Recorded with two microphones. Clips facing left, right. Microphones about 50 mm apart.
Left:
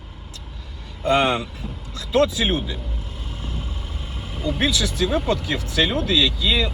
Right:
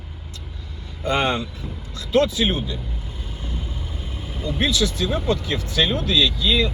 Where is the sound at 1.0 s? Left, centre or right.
Left.